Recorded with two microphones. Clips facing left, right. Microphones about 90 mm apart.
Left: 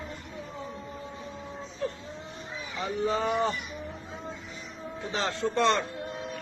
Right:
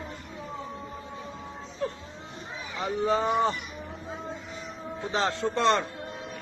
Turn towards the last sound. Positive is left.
turn(degrees=-25)  # may be behind; listen again after turning